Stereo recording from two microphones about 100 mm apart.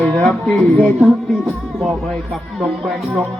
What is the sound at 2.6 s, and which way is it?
Speech, 5° right (ahead or behind).